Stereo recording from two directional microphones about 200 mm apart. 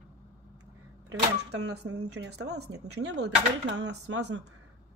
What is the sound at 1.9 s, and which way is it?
Speech, 75° right (ahead or behind).